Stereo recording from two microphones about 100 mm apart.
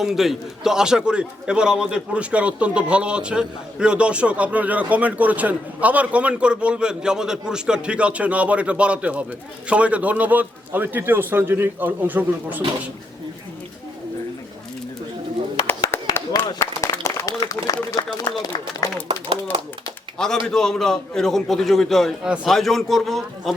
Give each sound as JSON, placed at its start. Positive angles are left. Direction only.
{"t": 0.0, "sound": "a man's voice", "side_deg": -5}
{"t": 15.9, "sound": "a sound", "side_deg": 25}
{"t": 16.3, "sound": "a sound", "side_deg": 40}
{"t": 16.9, "sound": "applause", "side_deg": 30}
{"t": 18.3, "sound": "speech", "side_deg": 50}
{"t": 20.1, "sound": "a man's voice", "side_deg": 5}